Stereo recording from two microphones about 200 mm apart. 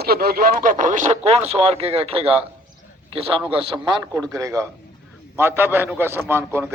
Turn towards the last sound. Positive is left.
turn(degrees=-10)  # may be behind; listen again after turning